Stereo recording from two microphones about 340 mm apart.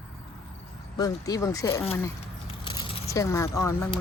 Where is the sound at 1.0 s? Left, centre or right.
Centre.